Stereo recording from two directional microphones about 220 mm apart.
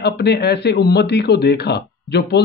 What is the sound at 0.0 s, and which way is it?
Speech, 50° left (ahead or behind).